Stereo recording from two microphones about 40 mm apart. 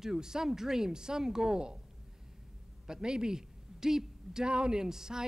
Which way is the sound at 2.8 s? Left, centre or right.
Centre.